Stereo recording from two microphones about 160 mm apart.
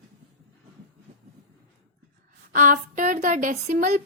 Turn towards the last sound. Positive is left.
turn(degrees=-55)  # may be behind; listen again after turning